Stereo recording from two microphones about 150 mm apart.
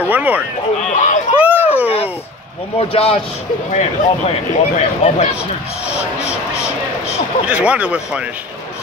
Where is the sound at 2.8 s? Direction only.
40° left (ahead or behind).